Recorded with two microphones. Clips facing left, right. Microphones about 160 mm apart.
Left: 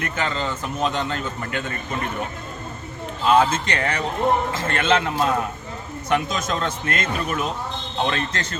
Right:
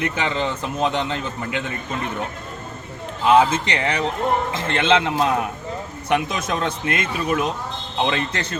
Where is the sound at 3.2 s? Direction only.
15° right (ahead or behind).